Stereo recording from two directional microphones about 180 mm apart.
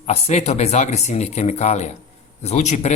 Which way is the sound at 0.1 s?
35° left (ahead or behind).